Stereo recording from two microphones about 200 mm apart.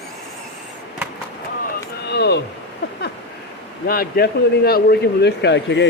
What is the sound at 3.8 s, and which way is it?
A man's voice, 45° left (ahead or behind).